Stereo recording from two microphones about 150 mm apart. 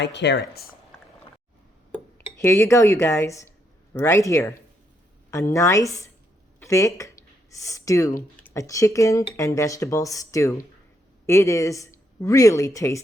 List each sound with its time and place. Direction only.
0.3 s speech: 90° left
1.9 s speech: 15° left (ahead or behind)